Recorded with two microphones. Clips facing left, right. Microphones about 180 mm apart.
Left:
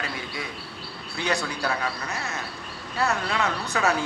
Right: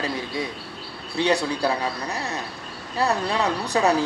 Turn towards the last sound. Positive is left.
turn(degrees=-35)  # may be behind; listen again after turning